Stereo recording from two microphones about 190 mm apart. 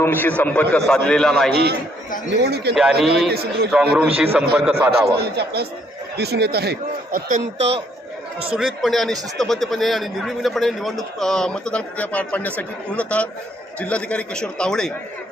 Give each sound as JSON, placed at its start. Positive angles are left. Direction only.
{"t": 0.0, "sound": "a man's voice", "side_deg": 10}
{"t": 1.5, "sound": "a man's voice", "side_deg": -55}
{"t": 2.7, "sound": "a man's voice", "side_deg": -5}
{"t": 5.1, "sound": "a man's voice", "side_deg": -55}
{"t": 8.5, "sound": "a man's voice", "side_deg": 0}